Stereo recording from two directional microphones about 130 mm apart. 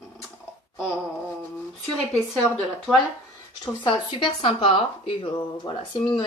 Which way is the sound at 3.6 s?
35° left (ahead or behind).